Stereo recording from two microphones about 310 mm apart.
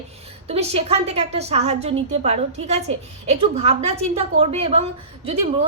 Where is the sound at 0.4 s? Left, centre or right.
Centre.